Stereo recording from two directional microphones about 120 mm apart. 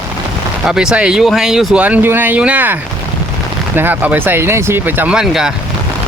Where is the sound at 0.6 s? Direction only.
5° right (ahead or behind).